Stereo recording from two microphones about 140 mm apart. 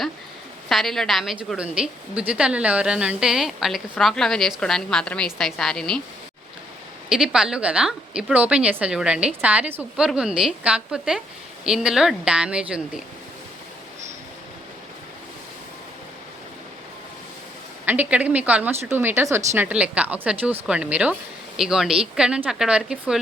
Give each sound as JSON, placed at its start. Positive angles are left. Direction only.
{"t": 0.7, "sound": "a woman's voice", "side_deg": 0}
{"t": 7.1, "sound": "a woman's voice", "side_deg": -5}
{"t": 17.8, "sound": "a woman's voice", "side_deg": -10}